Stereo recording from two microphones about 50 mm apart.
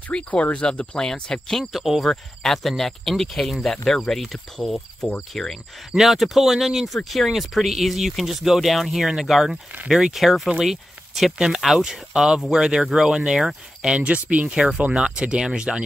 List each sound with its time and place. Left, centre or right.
0.1 s speech: left
1.6 s speech: centre
2.0 s speech: centre
11.3 s speech: centre
13.8 s speech: right